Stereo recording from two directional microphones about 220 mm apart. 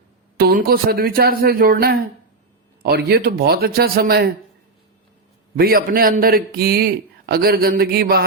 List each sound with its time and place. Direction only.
0.3 s a man's voice: 45° right (ahead or behind)
5.5 s a man's voice: 45° right (ahead or behind)